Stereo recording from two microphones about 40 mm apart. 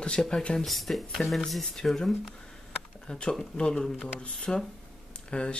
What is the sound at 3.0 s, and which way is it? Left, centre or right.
Speech, left.